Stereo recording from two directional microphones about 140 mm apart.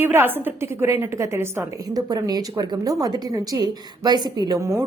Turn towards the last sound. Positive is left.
turn(degrees=-20)  # may be behind; listen again after turning